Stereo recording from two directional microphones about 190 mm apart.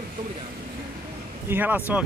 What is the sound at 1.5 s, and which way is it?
Speech, 10° right (ahead or behind).